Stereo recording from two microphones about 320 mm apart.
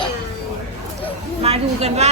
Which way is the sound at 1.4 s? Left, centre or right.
Centre.